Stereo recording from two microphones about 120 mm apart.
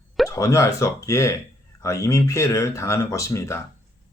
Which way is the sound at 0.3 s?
25° left (ahead or behind).